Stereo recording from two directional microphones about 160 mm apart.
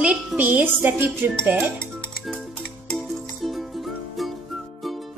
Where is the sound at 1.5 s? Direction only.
5° left (ahead or behind).